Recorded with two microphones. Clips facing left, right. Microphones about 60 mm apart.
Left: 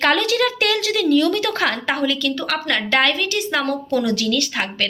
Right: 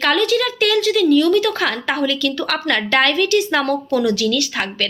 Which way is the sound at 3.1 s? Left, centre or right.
Centre.